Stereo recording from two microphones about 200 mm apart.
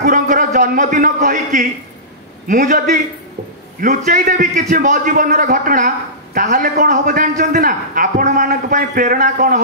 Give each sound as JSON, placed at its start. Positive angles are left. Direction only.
{"t": 0.0, "sound": "a man's voice", "side_deg": -40}